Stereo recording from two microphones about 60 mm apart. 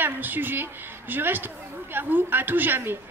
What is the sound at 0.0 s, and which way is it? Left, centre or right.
Speech, right.